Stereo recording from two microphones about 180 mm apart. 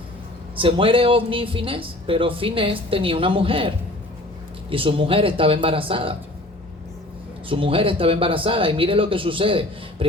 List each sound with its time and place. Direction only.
0.6 s speech: 30° right (ahead or behind)
7.4 s speech: 30° right (ahead or behind)